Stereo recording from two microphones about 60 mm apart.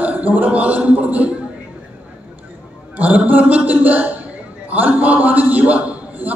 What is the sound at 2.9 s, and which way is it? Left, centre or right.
A man's voice, right.